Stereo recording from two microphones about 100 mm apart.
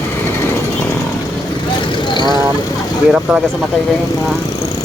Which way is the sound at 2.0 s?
50° left (ahead or behind).